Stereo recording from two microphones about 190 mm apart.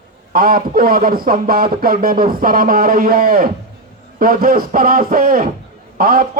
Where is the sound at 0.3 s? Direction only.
50° right (ahead or behind).